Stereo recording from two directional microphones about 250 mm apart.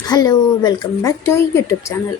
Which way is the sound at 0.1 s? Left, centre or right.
Centre.